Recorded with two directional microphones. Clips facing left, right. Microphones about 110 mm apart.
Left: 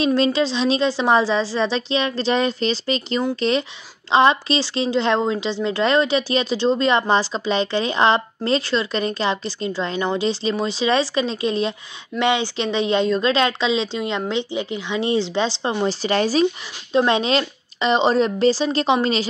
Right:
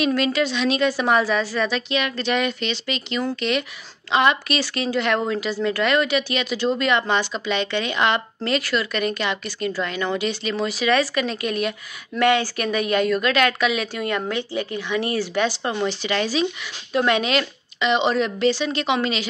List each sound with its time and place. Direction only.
0.0 s a woman's voice: 30° left (ahead or behind)
15.8 s a woman's voice: 35° left (ahead or behind)
16.9 s a woman's voice: 30° left (ahead or behind)